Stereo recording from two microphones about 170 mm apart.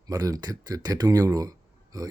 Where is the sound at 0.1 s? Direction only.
20° right (ahead or behind).